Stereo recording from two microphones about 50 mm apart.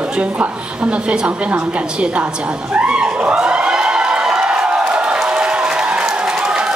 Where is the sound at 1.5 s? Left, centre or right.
Right.